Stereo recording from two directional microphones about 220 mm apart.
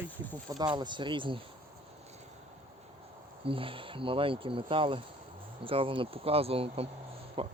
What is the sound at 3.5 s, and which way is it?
Speech, 25° right (ahead or behind).